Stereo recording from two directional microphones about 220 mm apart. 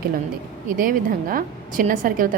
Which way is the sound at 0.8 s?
40° right (ahead or behind).